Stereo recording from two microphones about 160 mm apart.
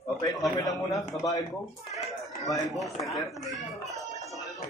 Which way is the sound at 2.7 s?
Centre (ahead or behind).